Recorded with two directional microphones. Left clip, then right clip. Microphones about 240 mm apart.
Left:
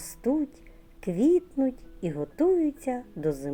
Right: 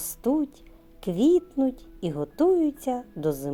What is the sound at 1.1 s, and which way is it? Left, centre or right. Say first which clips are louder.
A woman's voice: right 2 dB; right.